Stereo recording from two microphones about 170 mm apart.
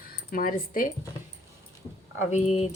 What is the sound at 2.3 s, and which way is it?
Speech, 40° left (ahead or behind).